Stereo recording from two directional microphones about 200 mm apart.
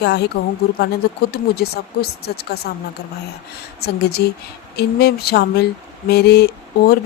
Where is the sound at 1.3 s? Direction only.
50° left (ahead or behind).